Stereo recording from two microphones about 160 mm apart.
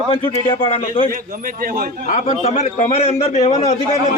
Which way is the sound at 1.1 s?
60° right (ahead or behind).